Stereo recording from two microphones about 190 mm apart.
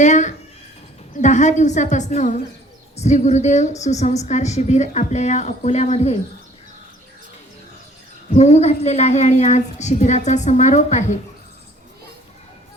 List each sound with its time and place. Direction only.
0.0 s a woman's voice: 40° left (ahead or behind)
8.3 s a woman's voice: 35° left (ahead or behind)